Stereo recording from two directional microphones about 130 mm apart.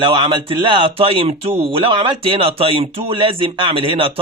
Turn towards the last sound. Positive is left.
turn(degrees=-45)  # may be behind; listen again after turning